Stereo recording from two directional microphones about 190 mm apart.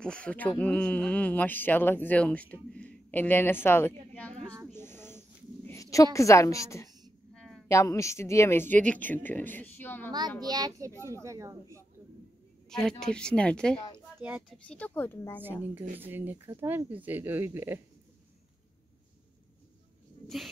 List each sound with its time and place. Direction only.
0.0 s speech: 5° left (ahead or behind)
4.7 s a sound: 10° left (ahead or behind)
6.1 s speech: 15° left (ahead or behind)
7.3 s a sound: centre (ahead or behind)
7.6 s speech: 15° left (ahead or behind)
10.4 s a child's voice: 20° right (ahead or behind)
12.6 s a sound: 5° left (ahead or behind)
13.0 s speech: 5° left (ahead or behind)
13.9 s speech: 10° right (ahead or behind)
14.7 s speech: 10° left (ahead or behind)
16.0 s speech: 10° right (ahead or behind)
20.2 s speech: centre (ahead or behind)